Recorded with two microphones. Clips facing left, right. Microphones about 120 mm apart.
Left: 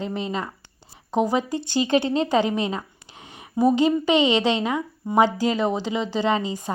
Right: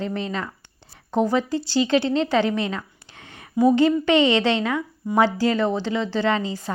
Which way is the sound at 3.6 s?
10° left (ahead or behind).